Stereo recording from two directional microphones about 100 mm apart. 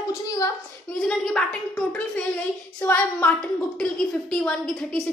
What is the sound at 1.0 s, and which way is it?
Speech, 10° left (ahead or behind).